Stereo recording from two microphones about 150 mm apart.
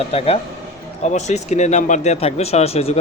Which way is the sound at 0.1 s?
45° left (ahead or behind).